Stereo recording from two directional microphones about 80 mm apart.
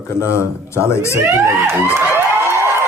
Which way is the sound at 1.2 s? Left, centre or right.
Right.